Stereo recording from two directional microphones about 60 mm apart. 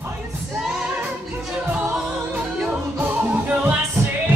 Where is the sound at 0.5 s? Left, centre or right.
Centre.